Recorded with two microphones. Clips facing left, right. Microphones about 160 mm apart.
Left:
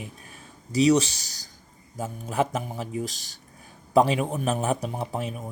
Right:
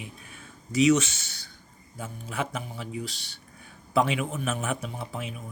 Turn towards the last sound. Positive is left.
turn(degrees=40)  # may be behind; listen again after turning